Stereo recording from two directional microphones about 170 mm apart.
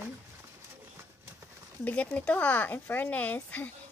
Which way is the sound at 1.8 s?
10° left (ahead or behind).